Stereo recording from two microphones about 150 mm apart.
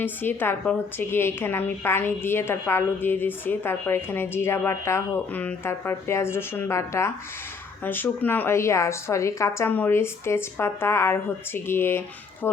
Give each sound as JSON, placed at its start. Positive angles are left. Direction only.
{"t": 0.0, "sound": "a woman's voice", "side_deg": 15}